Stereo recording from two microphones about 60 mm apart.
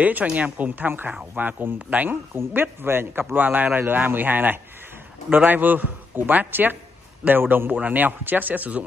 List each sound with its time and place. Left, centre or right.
0.0 s speech: right
2.3 s a man's voice: right